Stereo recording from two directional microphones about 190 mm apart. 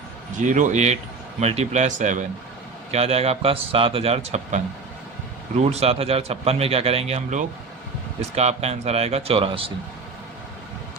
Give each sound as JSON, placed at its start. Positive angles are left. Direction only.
{"t": 0.3, "sound": "a man's voice", "side_deg": -40}